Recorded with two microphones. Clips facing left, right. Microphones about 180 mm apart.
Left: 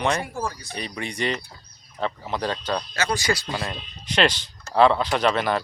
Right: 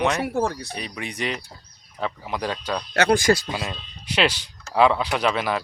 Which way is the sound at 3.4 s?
10° right (ahead or behind).